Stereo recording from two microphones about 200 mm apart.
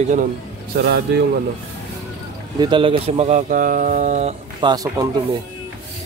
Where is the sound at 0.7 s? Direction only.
55° right (ahead or behind).